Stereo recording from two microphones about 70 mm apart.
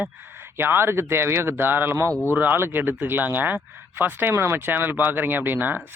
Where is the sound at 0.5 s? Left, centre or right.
Right.